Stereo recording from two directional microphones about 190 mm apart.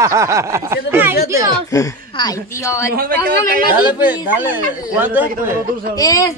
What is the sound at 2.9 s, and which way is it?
Speech, 50° right (ahead or behind).